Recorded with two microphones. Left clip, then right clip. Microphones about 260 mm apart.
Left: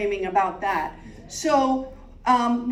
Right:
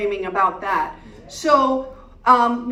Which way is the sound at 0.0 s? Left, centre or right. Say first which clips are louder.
Right 3 dB; right.